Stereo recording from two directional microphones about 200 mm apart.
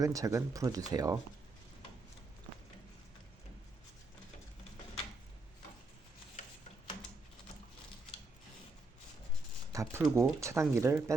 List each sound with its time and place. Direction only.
0.0 s speech: 15° right (ahead or behind)
9.7 s speech: 15° right (ahead or behind)